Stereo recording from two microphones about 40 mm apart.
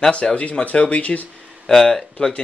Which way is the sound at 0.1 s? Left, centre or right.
Left.